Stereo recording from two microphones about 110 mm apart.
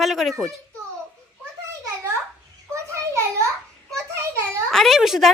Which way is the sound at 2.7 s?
25° right (ahead or behind).